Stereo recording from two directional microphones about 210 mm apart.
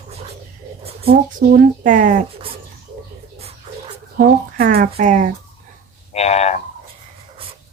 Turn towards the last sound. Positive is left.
turn(degrees=30)  # may be behind; listen again after turning